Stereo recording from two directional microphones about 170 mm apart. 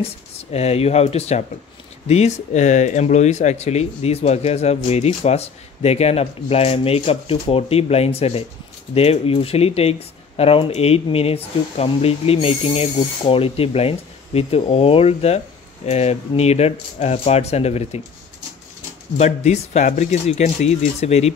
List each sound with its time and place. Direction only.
0.4 s speech: 40° left (ahead or behind)
19.1 s speech: 40° left (ahead or behind)